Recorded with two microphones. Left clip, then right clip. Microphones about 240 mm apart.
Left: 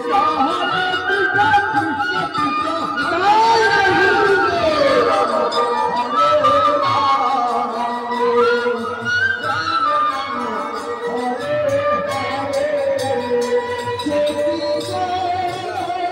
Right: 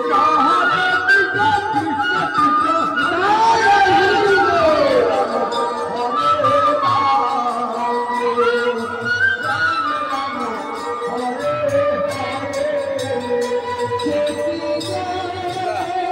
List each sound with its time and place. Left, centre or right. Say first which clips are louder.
0.3 s music: right 4 dB; centre
3.0 s a sound: left 4 dB; centre
4.2 s music: right 1 dB; centre
6.1 s music: left 1 dB; left